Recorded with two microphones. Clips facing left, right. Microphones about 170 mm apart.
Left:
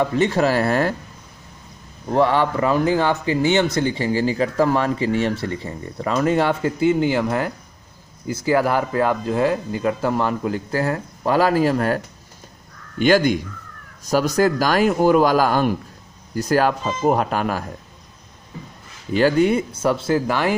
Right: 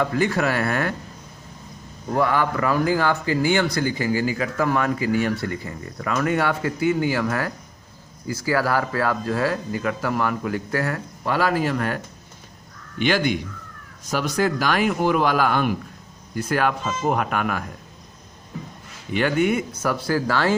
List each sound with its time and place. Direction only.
0.0 s speech: 25° left (ahead or behind)
2.1 s speech: 25° left (ahead or behind)
11.2 s speech: 40° left (ahead or behind)
13.0 s speech: 45° left (ahead or behind)
19.1 s speech: 35° left (ahead or behind); by 20.5 s 20° left (ahead or behind)